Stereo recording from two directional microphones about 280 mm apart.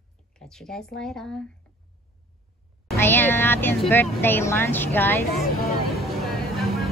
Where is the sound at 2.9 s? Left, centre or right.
Centre.